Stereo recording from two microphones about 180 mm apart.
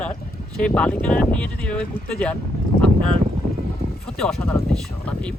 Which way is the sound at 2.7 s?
50° left (ahead or behind).